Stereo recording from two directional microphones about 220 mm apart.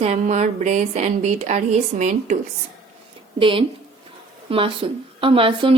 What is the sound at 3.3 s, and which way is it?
A woman's voice, 25° right (ahead or behind).